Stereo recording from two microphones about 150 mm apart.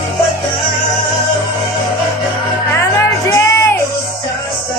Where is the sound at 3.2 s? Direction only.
15° left (ahead or behind).